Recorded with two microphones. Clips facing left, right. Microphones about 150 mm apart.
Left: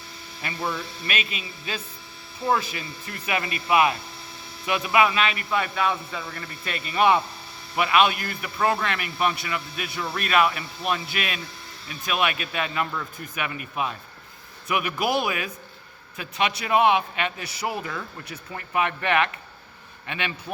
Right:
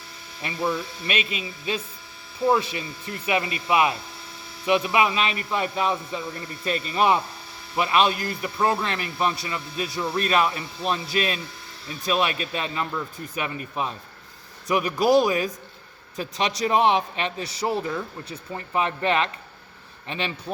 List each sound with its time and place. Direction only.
1.0 s speech: 30° right (ahead or behind)
5.9 s a man's voice: 15° right (ahead or behind)
6.7 s a man's voice: 35° right (ahead or behind)